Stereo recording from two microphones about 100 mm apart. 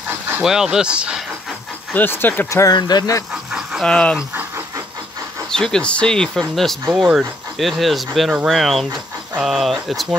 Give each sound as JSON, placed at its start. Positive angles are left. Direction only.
{"t": 0.4, "sound": "speech", "side_deg": -5}
{"t": 2.0, "sound": "speech", "side_deg": 20}
{"t": 2.5, "sound": "speech", "side_deg": 40}
{"t": 3.8, "sound": "speech", "side_deg": 10}
{"t": 5.5, "sound": "speech", "side_deg": 5}